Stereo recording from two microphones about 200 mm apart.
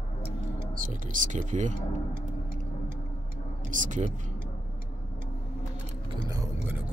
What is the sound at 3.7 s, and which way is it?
Speech, 40° right (ahead or behind).